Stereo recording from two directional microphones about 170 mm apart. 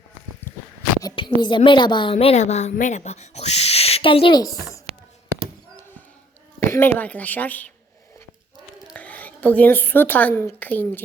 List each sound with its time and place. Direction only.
1.0 s a sound: 30° left (ahead or behind)
1.4 s a woman's voice: 30° left (ahead or behind)
6.7 s a woman's voice: 10° left (ahead or behind)
8.9 s a woman's voice: 10° left (ahead or behind)